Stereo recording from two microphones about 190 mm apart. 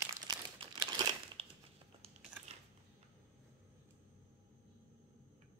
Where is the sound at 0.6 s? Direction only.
25° right (ahead or behind).